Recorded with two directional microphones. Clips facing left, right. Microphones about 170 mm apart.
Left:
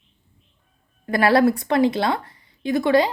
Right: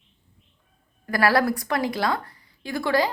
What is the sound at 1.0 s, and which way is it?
A woman's voice, 25° left (ahead or behind).